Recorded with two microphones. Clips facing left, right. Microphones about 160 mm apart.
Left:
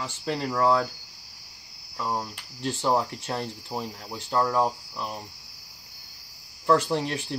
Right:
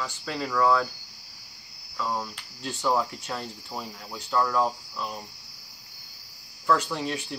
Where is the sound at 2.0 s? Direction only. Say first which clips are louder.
Even; 25° left (ahead or behind).